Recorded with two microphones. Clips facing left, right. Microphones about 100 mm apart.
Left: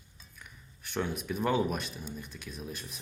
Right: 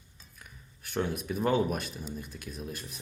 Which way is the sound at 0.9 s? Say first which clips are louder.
Right 2 dB; centre (ahead or behind).